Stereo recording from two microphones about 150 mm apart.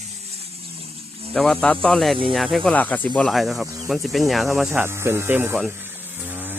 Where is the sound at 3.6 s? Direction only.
20° right (ahead or behind).